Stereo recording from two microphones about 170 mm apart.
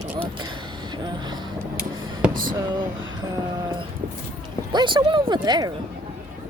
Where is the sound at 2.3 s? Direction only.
55° right (ahead or behind).